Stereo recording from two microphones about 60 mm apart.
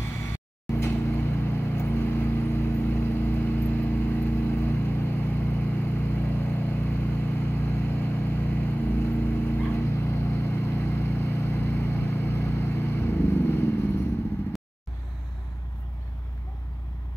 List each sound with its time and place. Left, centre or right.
0.0 s vehicle: left